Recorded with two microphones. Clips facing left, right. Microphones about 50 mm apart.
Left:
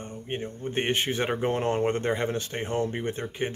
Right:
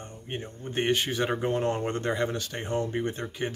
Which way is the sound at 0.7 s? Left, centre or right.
Left.